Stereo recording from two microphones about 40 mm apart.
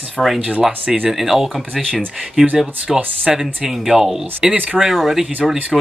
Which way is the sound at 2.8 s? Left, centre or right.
Centre.